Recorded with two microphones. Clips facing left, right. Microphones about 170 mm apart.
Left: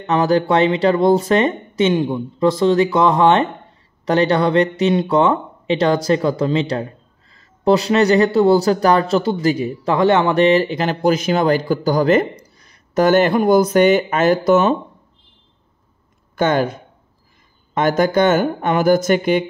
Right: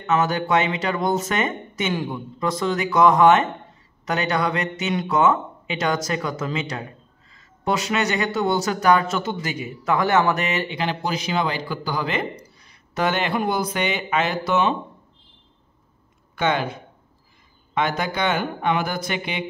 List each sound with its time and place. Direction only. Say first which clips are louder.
0.0 s speech: left 6 dB; 35° left (ahead or behind)
16.3 s speech: left 6 dB; 45° left (ahead or behind)